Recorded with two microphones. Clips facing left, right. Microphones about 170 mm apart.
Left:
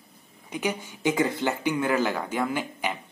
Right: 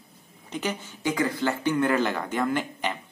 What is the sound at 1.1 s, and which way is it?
Speech, 20° left (ahead or behind).